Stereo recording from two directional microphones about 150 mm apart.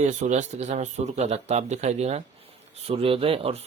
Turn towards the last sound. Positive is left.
turn(degrees=-40)  # may be behind; listen again after turning